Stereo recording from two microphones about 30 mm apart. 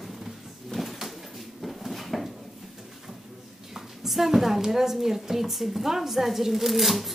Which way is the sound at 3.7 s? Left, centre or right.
Centre.